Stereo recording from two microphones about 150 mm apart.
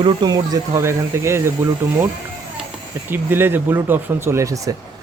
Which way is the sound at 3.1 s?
15° right (ahead or behind).